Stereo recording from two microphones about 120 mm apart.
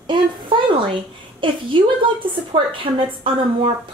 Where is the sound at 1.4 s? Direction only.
45° right (ahead or behind).